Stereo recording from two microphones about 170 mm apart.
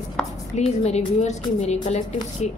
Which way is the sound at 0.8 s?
40° left (ahead or behind).